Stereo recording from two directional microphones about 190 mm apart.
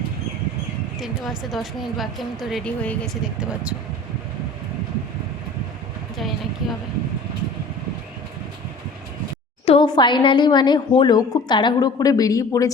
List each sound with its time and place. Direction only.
0.9 s a woman's voice: centre (ahead or behind)
6.1 s a sound: centre (ahead or behind)
9.6 s a woman's voice: 25° left (ahead or behind)